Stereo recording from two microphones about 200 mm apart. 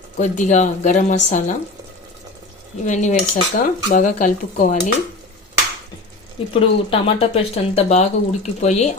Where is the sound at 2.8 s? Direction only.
35° left (ahead or behind).